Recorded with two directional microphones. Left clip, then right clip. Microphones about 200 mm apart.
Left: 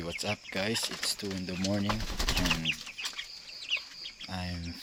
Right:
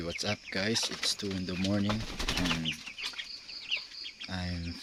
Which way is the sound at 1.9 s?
50° left (ahead or behind).